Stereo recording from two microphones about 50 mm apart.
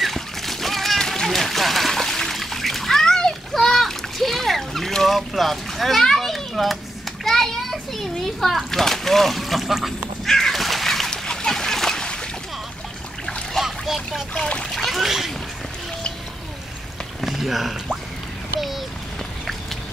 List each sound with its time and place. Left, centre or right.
0.0 s splash: centre
7.2 s a child's voice: centre
10.2 s splash: centre
13.5 s splash: centre
14.3 s speech: left
14.6 s a child's voice: centre
17.2 s a sound: centre